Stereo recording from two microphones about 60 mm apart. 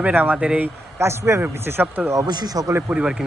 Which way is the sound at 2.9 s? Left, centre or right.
Centre.